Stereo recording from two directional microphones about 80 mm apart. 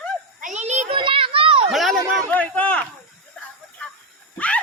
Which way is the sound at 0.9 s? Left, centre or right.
Right.